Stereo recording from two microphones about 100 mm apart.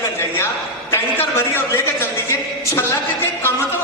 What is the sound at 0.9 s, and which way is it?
A man's voice, 25° left (ahead or behind).